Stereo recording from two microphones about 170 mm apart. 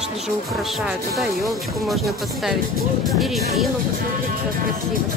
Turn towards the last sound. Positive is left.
turn(degrees=0)  # may be behind; listen again after turning